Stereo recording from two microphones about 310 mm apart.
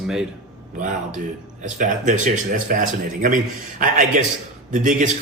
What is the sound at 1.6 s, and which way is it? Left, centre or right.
A man's voice, right.